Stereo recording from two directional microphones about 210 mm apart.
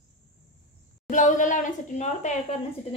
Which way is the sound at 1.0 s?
40° left (ahead or behind).